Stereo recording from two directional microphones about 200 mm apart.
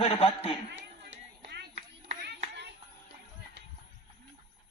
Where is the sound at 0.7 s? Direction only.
60° right (ahead or behind).